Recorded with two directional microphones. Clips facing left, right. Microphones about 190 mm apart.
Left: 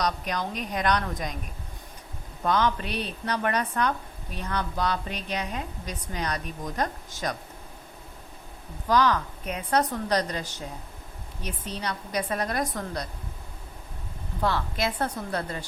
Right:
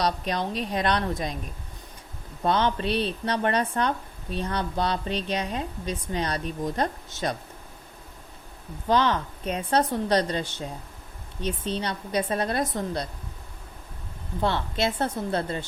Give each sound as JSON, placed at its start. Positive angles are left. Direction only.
{"t": 0.0, "sound": "speech", "side_deg": -30}
{"t": 2.4, "sound": "speech", "side_deg": -30}
{"t": 8.9, "sound": "speech", "side_deg": -25}
{"t": 14.4, "sound": "speech", "side_deg": -25}